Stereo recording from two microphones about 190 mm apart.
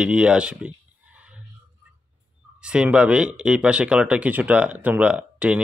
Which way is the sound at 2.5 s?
5° right (ahead or behind).